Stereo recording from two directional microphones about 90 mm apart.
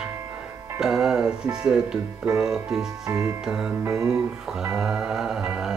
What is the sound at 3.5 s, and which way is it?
Music, 10° right (ahead or behind).